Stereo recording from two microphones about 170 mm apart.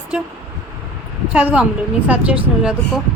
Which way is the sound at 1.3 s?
5° right (ahead or behind).